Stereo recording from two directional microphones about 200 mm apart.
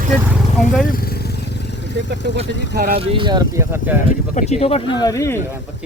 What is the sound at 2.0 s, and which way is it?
Speech, 60° right (ahead or behind).